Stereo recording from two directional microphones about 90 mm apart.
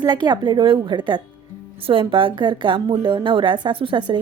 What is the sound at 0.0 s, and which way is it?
A woman's voice, 55° right (ahead or behind).